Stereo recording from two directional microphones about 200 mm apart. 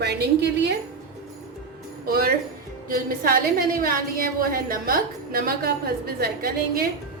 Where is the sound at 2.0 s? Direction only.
50° right (ahead or behind).